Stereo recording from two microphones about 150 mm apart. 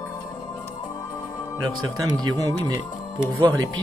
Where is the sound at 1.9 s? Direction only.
25° right (ahead or behind).